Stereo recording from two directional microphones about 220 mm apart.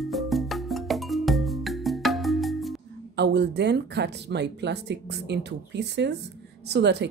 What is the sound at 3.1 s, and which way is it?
Speech, 50° right (ahead or behind).